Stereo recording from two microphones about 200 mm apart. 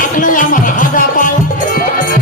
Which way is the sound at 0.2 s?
40° left (ahead or behind).